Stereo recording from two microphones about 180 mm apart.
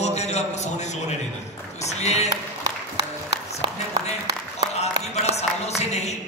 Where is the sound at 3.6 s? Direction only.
25° right (ahead or behind).